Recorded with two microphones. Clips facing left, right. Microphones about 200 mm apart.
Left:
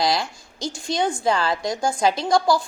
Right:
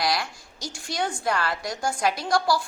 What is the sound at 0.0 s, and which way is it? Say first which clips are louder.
A woman's voice: left 4 dB; 25° left (ahead or behind).